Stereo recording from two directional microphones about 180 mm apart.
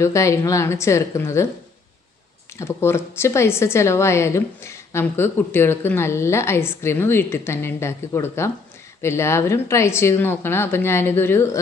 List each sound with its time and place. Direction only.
0.0 s a woman's voice: 15° left (ahead or behind)
2.5 s a woman's voice: 15° left (ahead or behind)